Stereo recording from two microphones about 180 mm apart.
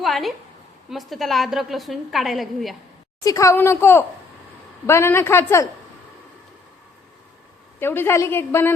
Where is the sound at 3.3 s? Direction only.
15° left (ahead or behind).